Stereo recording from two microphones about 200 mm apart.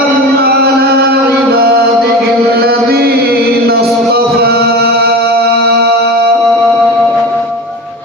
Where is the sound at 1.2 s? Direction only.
50° right (ahead or behind).